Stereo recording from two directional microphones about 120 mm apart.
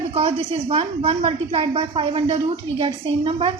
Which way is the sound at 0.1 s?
55° right (ahead or behind).